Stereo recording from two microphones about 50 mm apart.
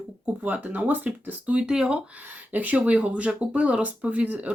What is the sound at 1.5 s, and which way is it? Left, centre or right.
Speech, centre.